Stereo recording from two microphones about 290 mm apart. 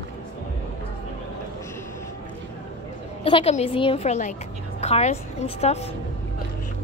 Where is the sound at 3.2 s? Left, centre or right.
Centre.